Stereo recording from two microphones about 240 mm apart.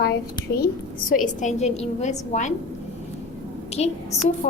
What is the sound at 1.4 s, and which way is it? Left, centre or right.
A woman's voice, left.